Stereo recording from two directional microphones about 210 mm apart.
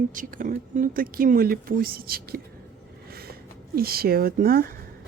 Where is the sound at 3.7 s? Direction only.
45° right (ahead or behind).